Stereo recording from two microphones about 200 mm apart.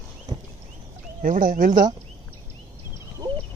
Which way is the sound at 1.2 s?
40° right (ahead or behind).